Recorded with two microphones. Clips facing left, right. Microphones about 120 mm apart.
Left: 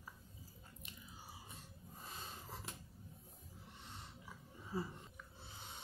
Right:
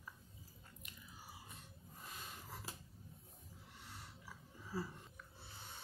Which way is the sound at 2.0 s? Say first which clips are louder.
Left 1 dB; 30° left (ahead or behind).